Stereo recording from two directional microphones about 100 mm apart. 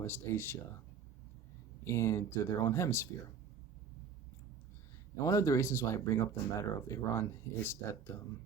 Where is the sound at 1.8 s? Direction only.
30° left (ahead or behind).